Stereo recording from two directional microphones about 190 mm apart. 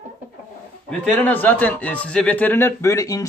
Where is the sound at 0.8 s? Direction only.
5° left (ahead or behind).